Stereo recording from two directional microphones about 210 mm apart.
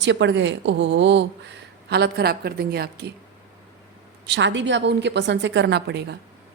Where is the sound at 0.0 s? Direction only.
60° right (ahead or behind).